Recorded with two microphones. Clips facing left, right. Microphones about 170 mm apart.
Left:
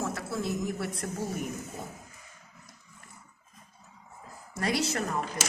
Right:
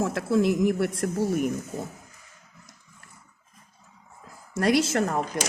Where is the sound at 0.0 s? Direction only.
90° right; by 1.5 s 70° right (ahead or behind).